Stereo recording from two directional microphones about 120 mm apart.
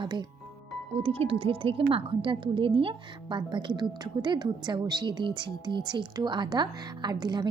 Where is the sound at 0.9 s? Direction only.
55° right (ahead or behind).